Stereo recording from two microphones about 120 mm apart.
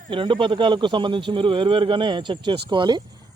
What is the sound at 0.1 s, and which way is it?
A man's voice, 45° right (ahead or behind).